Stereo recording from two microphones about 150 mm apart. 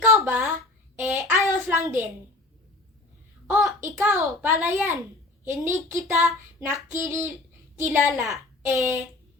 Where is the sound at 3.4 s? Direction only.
15° right (ahead or behind).